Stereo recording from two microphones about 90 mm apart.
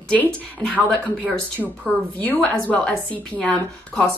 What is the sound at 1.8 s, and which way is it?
A woman's voice, 15° left (ahead or behind).